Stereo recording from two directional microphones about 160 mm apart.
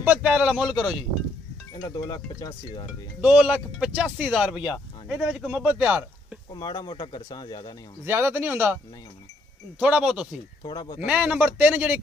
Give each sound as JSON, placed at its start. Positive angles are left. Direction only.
{"t": 0.0, "sound": "speech", "side_deg": -10}
{"t": 1.8, "sound": "speech", "side_deg": 30}
{"t": 3.2, "sound": "speech", "side_deg": -5}
{"t": 6.5, "sound": "speech", "side_deg": 25}
{"t": 8.0, "sound": "speech", "side_deg": -15}
{"t": 9.8, "sound": "speech", "side_deg": -5}
{"t": 10.6, "sound": "speech", "side_deg": 25}
{"t": 11.1, "sound": "speech", "side_deg": -10}